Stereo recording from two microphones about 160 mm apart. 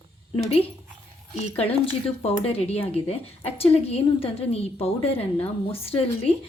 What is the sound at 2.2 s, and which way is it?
Speech, 40° left (ahead or behind).